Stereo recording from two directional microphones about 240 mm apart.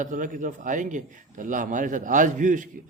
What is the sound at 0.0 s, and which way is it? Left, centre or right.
A man's voice, right.